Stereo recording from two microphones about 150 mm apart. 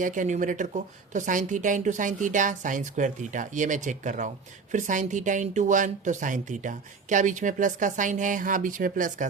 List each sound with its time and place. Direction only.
0.0 s speech: 60° right (ahead or behind)